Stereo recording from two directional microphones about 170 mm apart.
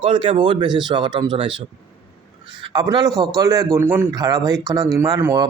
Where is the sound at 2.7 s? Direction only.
25° right (ahead or behind).